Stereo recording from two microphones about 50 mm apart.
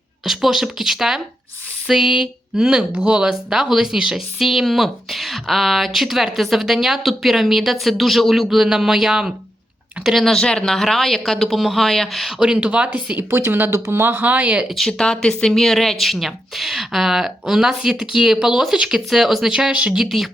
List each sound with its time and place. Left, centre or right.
0.3 s speech: centre
10.2 s speech: centre
12.5 s speech: right
13.5 s speech: right
13.7 s speech: right
14.2 s speech: right
14.8 s speech: centre